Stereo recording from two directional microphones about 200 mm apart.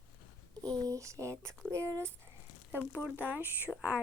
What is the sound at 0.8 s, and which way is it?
Speech, 15° right (ahead or behind).